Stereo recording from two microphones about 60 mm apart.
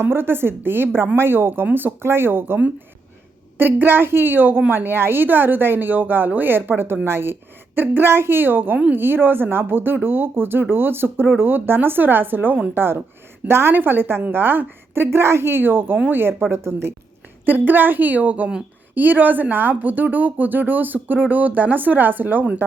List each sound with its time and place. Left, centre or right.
0.0 s speech: right
3.6 s speech: right
16.5 s a woman's voice: right
17.4 s speech: right